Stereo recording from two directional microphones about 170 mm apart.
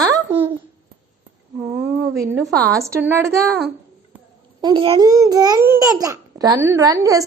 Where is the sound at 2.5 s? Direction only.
15° right (ahead or behind).